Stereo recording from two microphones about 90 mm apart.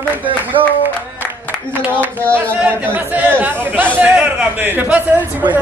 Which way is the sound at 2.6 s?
20° right (ahead or behind).